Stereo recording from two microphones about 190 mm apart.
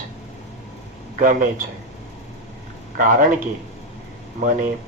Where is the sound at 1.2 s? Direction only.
45° right (ahead or behind).